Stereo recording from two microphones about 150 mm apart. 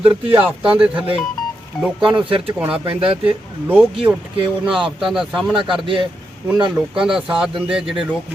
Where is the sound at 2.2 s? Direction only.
35° right (ahead or behind).